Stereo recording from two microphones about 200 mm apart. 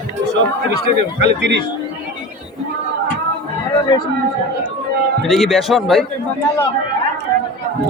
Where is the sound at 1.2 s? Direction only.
55° right (ahead or behind).